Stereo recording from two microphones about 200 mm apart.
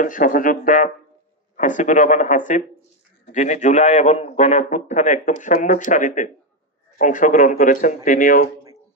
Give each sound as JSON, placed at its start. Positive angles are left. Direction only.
{"t": 0.0, "sound": "a man's voice", "side_deg": 40}